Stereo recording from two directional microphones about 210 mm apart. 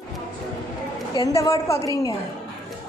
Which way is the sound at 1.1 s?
15° left (ahead or behind).